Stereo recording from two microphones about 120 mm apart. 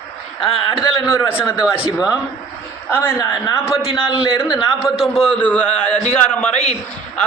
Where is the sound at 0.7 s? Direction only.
30° left (ahead or behind).